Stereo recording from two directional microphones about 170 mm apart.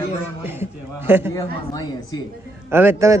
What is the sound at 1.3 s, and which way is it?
Speech, 20° left (ahead or behind).